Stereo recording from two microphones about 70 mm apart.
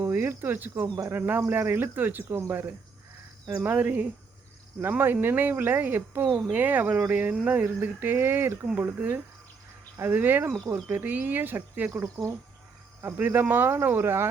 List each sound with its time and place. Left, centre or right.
0.0 s speech: right
13.1 s speech: right